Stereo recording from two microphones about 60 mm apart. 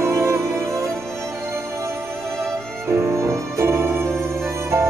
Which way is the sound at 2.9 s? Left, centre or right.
Right.